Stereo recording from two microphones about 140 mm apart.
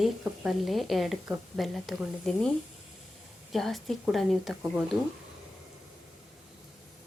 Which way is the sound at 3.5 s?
Centre (ahead or behind).